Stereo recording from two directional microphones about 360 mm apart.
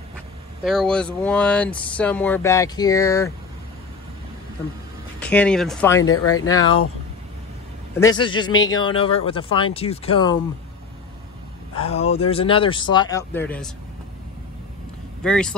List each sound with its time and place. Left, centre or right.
0.7 s speech: centre
5.2 s speech: centre
6.0 s speech: left
6.4 s speech: centre
8.0 s speech: centre
11.7 s speech: centre
15.2 s speech: centre